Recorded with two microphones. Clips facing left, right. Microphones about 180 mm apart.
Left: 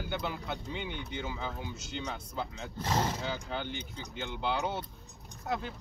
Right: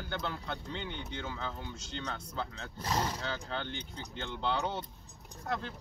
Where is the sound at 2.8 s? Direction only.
25° left (ahead or behind).